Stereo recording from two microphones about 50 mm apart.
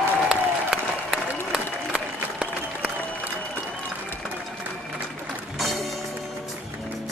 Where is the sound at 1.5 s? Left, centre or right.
Centre.